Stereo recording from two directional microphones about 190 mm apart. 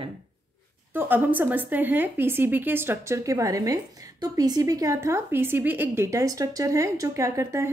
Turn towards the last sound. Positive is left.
turn(degrees=-15)  # may be behind; listen again after turning